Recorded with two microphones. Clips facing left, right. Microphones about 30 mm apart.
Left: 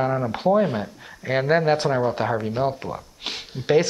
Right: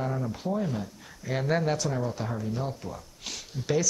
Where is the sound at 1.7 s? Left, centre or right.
Left.